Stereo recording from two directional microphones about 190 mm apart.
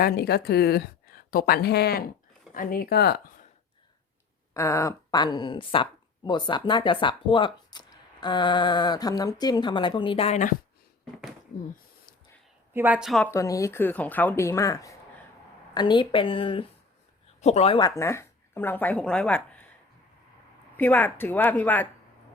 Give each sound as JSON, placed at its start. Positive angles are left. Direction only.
{"t": 0.0, "sound": "a woman's voice", "side_deg": 55}
{"t": 4.5, "sound": "speech", "side_deg": 15}
{"t": 12.7, "sound": "speech", "side_deg": -10}
{"t": 13.3, "sound": "speech", "side_deg": 15}
{"t": 20.7, "sound": "speech", "side_deg": 10}